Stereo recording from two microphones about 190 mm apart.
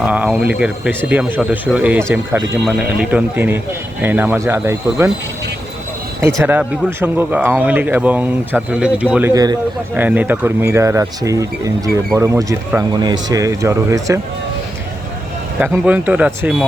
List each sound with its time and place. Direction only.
0.0 s speech: 5° right (ahead or behind)
6.4 s speech: 10° right (ahead or behind)
9.3 s speech: 20° right (ahead or behind)
9.9 s speech: 10° right (ahead or behind)
15.9 s speech: 10° right (ahead or behind)